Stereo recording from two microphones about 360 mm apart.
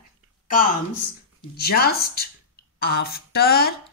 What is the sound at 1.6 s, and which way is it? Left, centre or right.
A woman's voice, left.